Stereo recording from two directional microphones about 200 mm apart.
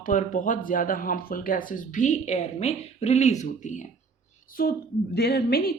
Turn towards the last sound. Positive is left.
turn(degrees=50)  # may be behind; listen again after turning